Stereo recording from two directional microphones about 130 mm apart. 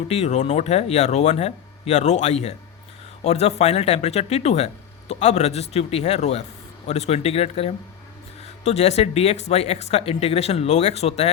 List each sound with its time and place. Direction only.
0.1 s speech: 60° left (ahead or behind)